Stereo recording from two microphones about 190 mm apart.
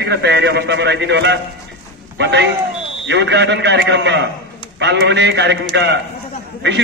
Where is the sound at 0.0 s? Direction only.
60° right (ahead or behind).